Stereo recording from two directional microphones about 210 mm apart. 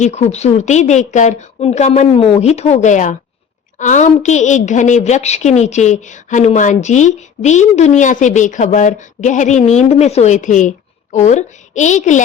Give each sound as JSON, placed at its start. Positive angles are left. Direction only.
{"t": 0.0, "sound": "a woman's voice", "side_deg": 30}